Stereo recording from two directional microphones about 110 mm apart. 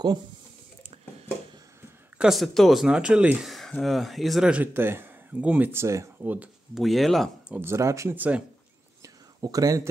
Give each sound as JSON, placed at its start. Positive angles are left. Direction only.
{"t": 2.1, "sound": "speech", "side_deg": 0}
{"t": 3.5, "sound": "speech", "side_deg": 0}
{"t": 6.2, "sound": "speech", "side_deg": -15}
{"t": 6.7, "sound": "speech", "side_deg": 0}
{"t": 7.6, "sound": "speech", "side_deg": -25}
{"t": 8.2, "sound": "speech", "side_deg": -10}
{"t": 9.0, "sound": "a sound", "side_deg": -35}